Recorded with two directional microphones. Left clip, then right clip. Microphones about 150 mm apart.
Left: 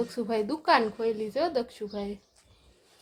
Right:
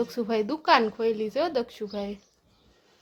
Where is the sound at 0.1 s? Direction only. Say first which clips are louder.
Right 2 dB; 5° right (ahead or behind).